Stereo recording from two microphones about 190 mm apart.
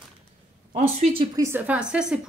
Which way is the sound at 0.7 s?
35° right (ahead or behind).